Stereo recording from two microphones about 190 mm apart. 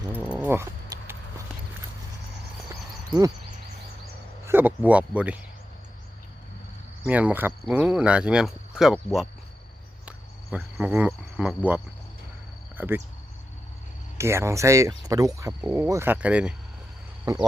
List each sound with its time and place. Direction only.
0.1 s a sound: 10° right (ahead or behind)
3.1 s a sound: 15° right (ahead or behind)
4.4 s speech: 10° right (ahead or behind)
7.0 s speech: 10° right (ahead or behind)
10.1 s cricket: 5° right (ahead or behind)
12.7 s speech: 10° right (ahead or behind)
14.2 s speech: 15° right (ahead or behind)